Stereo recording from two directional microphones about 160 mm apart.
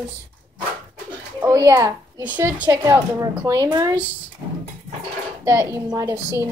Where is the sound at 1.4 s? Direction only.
15° right (ahead or behind).